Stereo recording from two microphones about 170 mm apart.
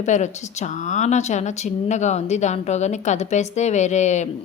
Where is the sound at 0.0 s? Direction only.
45° left (ahead or behind).